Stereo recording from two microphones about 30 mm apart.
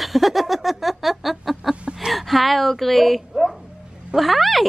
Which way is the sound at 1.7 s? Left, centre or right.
Right.